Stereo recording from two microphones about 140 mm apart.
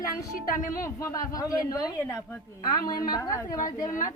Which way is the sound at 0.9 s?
20° left (ahead or behind).